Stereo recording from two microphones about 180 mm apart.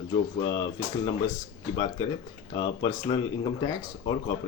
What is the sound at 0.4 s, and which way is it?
Speech, 25° left (ahead or behind).